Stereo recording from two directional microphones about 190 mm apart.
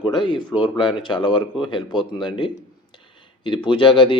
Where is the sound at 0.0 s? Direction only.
25° left (ahead or behind).